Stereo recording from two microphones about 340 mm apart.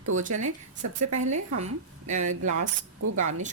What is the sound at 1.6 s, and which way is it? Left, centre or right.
Speech, centre.